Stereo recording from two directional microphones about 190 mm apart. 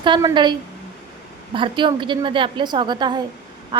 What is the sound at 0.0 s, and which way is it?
Speech, 25° right (ahead or behind).